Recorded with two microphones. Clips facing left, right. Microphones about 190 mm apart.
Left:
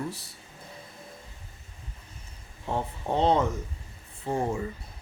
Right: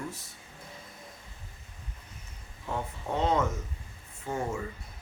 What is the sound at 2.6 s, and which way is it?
Speech, 30° left (ahead or behind).